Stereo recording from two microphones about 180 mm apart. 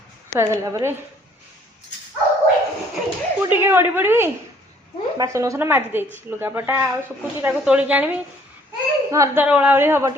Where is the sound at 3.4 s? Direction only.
10° right (ahead or behind).